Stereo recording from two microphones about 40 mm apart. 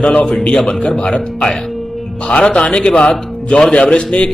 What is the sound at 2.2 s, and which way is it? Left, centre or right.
Speech, left.